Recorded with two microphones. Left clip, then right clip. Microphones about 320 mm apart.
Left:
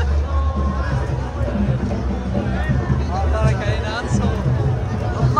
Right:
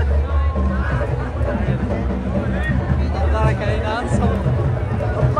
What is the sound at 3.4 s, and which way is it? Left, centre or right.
Music, right.